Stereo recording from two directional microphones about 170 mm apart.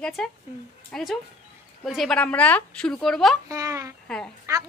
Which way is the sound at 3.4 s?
20° right (ahead or behind).